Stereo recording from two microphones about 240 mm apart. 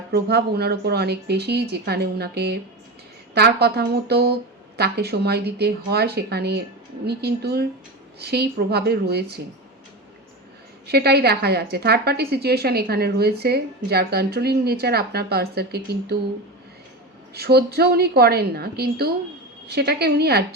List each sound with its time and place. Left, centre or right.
0.1 s a woman's voice: right
10.8 s a woman's voice: right
17.3 s a woman's voice: right